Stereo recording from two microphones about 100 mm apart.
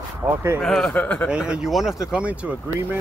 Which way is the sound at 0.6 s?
5° left (ahead or behind).